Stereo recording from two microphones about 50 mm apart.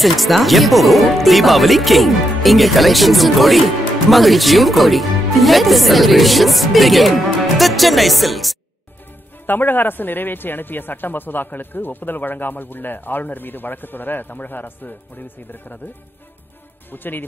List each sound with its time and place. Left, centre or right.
0.0 s speech: centre
9.5 s speech: left
16.9 s speech: left